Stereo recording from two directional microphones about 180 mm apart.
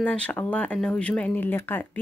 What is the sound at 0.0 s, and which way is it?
Speech, 5° left (ahead or behind).